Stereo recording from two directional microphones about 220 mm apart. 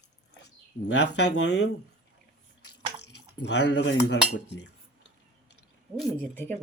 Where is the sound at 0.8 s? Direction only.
50° left (ahead or behind).